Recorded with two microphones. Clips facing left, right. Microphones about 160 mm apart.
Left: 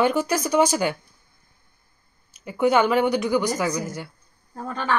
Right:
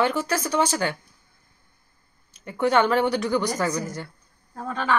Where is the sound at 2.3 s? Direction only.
5° left (ahead or behind).